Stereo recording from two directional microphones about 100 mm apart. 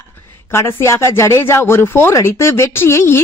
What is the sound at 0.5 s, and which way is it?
Speech, 25° left (ahead or behind).